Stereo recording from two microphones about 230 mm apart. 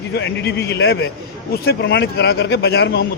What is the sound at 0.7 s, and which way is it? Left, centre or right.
A man's voice, left.